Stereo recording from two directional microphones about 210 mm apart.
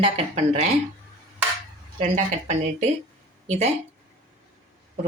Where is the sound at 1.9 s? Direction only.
35° right (ahead or behind).